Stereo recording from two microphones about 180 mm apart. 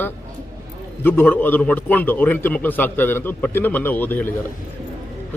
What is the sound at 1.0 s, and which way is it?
A man's voice, 10° left (ahead or behind).